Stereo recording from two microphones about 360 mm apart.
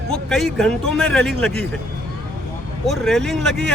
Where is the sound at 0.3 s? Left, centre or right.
Centre.